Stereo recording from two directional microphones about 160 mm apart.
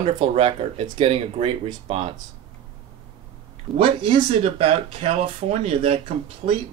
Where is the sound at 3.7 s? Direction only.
35° right (ahead or behind).